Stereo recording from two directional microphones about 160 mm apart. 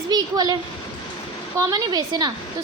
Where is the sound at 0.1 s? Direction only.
25° right (ahead or behind).